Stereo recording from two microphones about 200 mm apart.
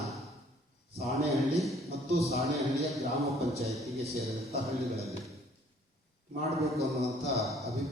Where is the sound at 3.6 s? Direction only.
30° right (ahead or behind).